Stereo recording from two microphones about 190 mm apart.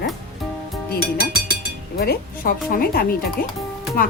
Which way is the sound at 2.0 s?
55° left (ahead or behind).